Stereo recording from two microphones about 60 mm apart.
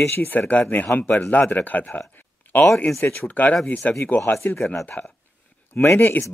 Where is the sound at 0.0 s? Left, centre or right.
Left.